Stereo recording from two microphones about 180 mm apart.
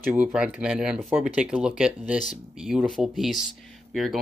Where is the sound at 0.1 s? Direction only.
5° right (ahead or behind).